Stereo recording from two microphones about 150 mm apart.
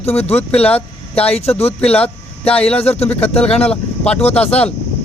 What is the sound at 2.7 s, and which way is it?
Speech, 45° left (ahead or behind).